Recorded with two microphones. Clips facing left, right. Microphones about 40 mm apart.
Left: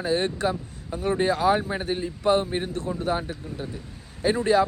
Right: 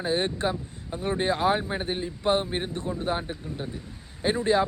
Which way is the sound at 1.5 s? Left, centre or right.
Right.